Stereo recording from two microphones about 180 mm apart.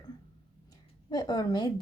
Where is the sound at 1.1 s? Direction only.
25° left (ahead or behind).